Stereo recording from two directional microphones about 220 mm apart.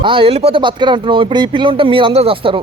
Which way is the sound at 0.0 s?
25° right (ahead or behind).